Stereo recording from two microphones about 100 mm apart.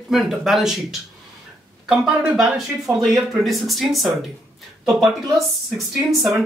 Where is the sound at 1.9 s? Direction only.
5° right (ahead or behind).